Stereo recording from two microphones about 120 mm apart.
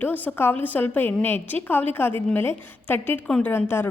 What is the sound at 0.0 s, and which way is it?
A woman's voice, 15° left (ahead or behind).